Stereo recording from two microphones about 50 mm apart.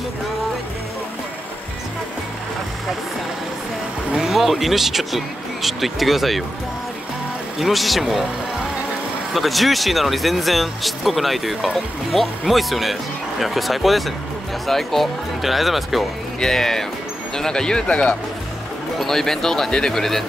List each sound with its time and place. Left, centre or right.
4.3 s speech: centre
7.5 s speech: centre
9.3 s speech: centre
16.3 s speech: centre
18.9 s speech: centre